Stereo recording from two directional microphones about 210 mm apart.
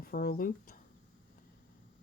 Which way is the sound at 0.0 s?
45° left (ahead or behind).